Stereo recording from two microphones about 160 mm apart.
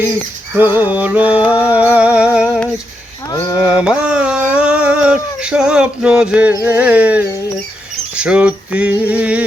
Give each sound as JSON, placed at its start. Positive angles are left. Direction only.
{"t": 0.5, "sound": "music", "side_deg": -10}
{"t": 3.2, "sound": "speech", "side_deg": 20}
{"t": 3.7, "sound": "a sound", "side_deg": -5}
{"t": 6.6, "sound": "music", "side_deg": -10}